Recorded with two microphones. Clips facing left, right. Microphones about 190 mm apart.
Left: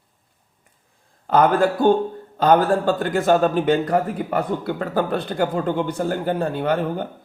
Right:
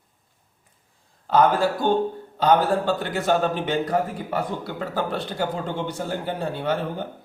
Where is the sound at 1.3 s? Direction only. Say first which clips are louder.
Left 2 dB; 55° left (ahead or behind).